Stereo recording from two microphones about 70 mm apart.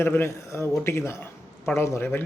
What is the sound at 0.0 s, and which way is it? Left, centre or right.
A man's voice, left.